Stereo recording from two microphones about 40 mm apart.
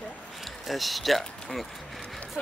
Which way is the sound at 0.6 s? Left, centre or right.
Centre.